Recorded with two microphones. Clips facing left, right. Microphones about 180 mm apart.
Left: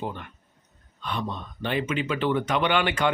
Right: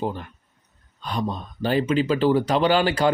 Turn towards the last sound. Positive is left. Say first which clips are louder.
# right 4 dB
turn(degrees=-35)  # may be behind; listen again after turning